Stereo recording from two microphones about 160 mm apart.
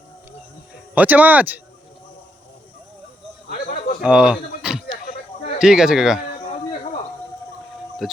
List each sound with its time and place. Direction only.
0.9 s speech: 10° right (ahead or behind)
4.0 s speech: 5° right (ahead or behind)
5.0 s a sound: 60° left (ahead or behind)
5.5 s speech: 5° right (ahead or behind)
8.0 s speech: centre (ahead or behind)